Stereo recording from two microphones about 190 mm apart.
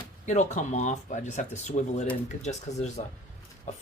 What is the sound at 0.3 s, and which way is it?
Speech, 40° left (ahead or behind).